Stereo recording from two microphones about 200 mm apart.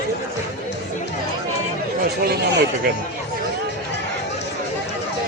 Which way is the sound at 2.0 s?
55° right (ahead or behind).